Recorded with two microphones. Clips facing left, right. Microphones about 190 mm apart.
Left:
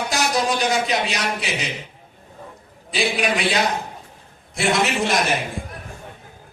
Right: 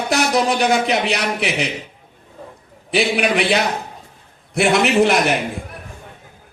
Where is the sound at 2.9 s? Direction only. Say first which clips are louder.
Right 4 dB; 65° right (ahead or behind).